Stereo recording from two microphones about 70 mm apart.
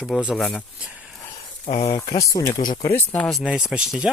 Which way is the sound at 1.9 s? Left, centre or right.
Left.